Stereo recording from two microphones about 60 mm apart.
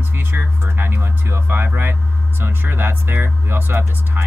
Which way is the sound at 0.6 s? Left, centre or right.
Right.